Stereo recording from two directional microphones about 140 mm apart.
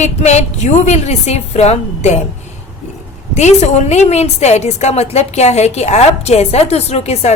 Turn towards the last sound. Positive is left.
turn(degrees=50)  # may be behind; listen again after turning